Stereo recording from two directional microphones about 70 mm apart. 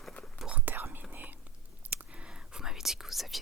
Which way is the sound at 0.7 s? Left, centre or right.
Right.